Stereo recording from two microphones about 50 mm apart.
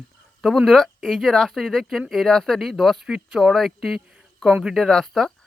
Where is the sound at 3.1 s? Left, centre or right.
Centre.